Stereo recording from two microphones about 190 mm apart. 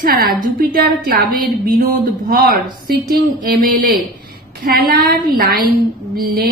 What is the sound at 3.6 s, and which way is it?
Speech, 45° right (ahead or behind).